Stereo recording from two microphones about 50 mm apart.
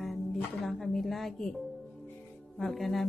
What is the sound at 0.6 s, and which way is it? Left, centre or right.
Speech, centre.